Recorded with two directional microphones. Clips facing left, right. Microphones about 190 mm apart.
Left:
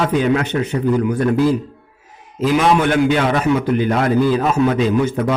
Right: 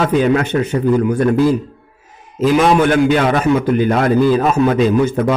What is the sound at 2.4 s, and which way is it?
A man's voice, 45° right (ahead or behind).